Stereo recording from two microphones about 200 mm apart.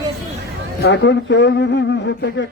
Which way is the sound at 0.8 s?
60° left (ahead or behind).